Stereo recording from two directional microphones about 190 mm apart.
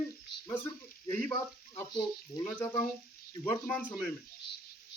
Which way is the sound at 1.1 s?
5° left (ahead or behind).